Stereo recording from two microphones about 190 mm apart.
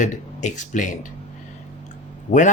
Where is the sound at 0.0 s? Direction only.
40° left (ahead or behind).